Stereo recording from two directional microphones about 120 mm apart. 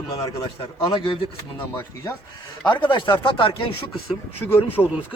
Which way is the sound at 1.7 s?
25° left (ahead or behind).